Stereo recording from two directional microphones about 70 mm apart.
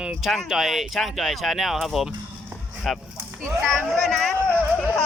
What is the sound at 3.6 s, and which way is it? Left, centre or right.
Speech, centre.